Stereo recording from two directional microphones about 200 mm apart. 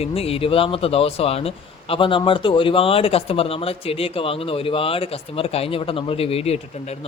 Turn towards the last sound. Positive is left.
turn(degrees=30)  # may be behind; listen again after turning